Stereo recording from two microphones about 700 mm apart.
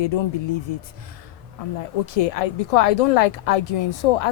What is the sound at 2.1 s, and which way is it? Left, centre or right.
A woman's voice, left.